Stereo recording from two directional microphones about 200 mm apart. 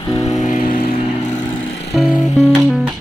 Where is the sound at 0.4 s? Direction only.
40° left (ahead or behind).